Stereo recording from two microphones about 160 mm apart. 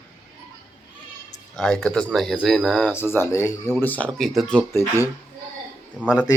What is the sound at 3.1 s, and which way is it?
Speech, 15° left (ahead or behind).